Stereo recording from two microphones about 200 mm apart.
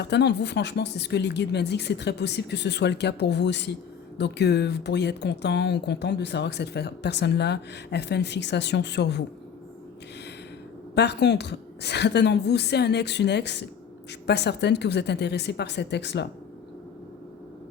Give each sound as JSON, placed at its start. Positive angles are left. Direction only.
{"t": 0.0, "sound": "speech", "side_deg": 55}
{"t": 10.9, "sound": "speech", "side_deg": 55}